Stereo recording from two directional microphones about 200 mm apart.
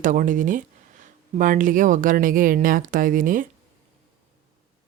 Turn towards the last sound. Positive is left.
turn(degrees=-45)  # may be behind; listen again after turning